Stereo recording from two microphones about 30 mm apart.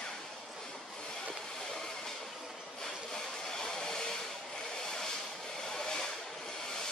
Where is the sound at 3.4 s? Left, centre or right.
Centre.